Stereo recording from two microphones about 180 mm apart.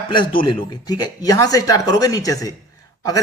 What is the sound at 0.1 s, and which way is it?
A man's voice, 25° left (ahead or behind).